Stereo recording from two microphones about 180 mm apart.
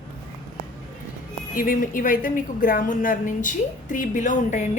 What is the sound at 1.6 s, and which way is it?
A woman's voice, 50° left (ahead or behind).